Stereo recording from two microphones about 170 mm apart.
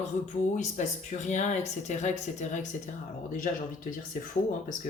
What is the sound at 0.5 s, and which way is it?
Speech, 45° left (ahead or behind).